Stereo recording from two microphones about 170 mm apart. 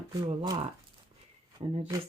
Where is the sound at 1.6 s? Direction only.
35° right (ahead or behind).